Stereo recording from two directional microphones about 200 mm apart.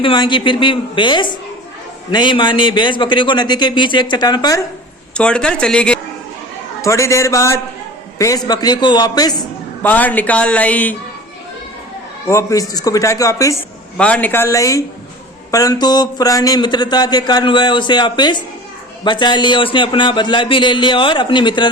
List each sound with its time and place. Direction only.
0.0 s speech: 25° left (ahead or behind)
5.1 s speech: 5° left (ahead or behind); by 9.4 s 20° left (ahead or behind)
9.8 s speech: 10° left (ahead or behind)
12.3 s speech: 15° left (ahead or behind)
13.9 s speech: 5° left (ahead or behind); by 21.7 s 25° left (ahead or behind)